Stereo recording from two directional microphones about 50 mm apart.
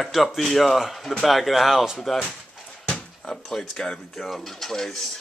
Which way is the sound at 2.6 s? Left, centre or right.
Centre.